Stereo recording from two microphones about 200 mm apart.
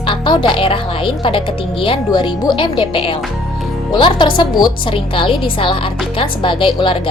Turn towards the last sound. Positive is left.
turn(degrees=25)  # may be behind; listen again after turning